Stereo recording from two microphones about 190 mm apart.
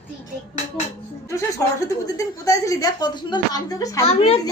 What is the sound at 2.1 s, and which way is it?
Speech, 20° left (ahead or behind).